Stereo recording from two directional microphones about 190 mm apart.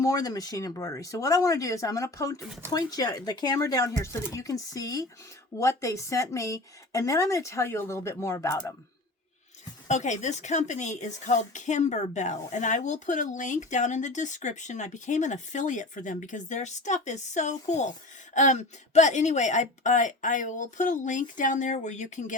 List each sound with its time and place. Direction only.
0.0 s speech: 20° left (ahead or behind)
9.9 s a woman's voice: 40° left (ahead or behind)